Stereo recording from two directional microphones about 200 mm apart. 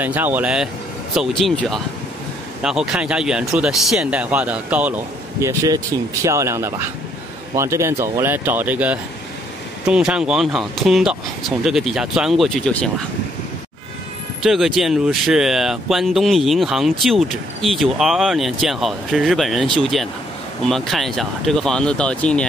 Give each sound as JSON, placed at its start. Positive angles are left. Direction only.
{"t": 0.0, "sound": "speech", "side_deg": -10}
{"t": 14.4, "sound": "speech", "side_deg": 0}